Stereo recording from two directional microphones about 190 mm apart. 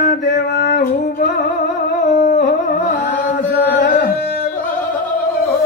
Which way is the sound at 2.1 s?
40° left (ahead or behind).